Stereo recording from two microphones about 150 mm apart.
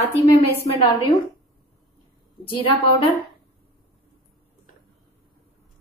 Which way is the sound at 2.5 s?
35° left (ahead or behind).